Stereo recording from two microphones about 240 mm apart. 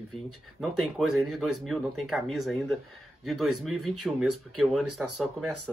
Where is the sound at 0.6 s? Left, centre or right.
Centre.